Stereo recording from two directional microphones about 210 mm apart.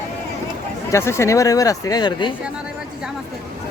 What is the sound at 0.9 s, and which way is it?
Speech, 10° left (ahead or behind).